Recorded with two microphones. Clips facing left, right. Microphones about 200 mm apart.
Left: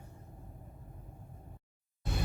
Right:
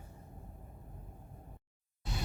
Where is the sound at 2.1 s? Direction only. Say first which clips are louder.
Left 4 dB; 55° left (ahead or behind).